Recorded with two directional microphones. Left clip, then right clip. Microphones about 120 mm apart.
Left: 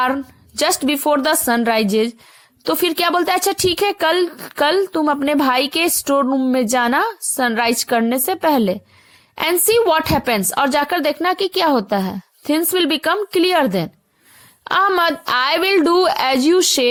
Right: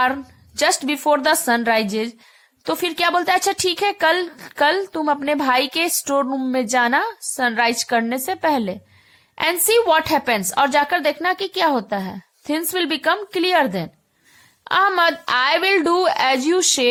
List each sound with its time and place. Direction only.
0.0 s a woman's voice: 35° left (ahead or behind)
14.6 s a sound: 40° left (ahead or behind)
14.8 s a woman's voice: 40° left (ahead or behind)